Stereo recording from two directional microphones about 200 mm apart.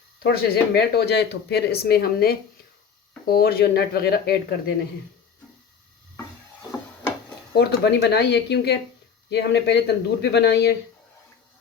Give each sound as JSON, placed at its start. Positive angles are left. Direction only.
{"t": 0.2, "sound": "speech", "side_deg": 50}
{"t": 7.5, "sound": "speech", "side_deg": 55}